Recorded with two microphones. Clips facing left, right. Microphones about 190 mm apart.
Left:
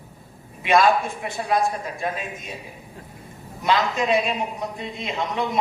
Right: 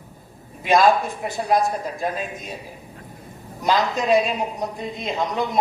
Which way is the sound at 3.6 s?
40° right (ahead or behind).